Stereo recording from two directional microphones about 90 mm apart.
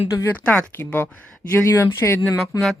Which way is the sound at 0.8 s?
20° left (ahead or behind).